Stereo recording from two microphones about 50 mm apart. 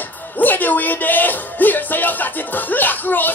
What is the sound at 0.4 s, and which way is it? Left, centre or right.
Music, left.